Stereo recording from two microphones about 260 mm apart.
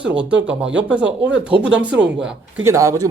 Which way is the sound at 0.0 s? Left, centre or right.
Centre.